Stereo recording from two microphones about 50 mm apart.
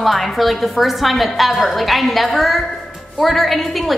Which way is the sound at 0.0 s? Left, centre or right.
Centre.